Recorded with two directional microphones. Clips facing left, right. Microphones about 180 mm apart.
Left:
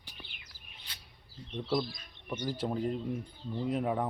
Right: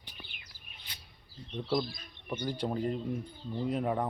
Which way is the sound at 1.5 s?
5° left (ahead or behind).